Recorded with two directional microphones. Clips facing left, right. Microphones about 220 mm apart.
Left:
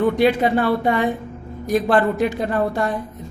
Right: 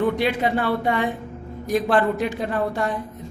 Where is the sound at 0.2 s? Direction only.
40° left (ahead or behind).